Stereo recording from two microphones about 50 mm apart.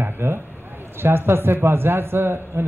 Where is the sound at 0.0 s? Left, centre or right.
Right.